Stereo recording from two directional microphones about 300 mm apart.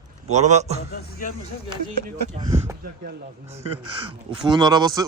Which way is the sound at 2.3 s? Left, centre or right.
Centre.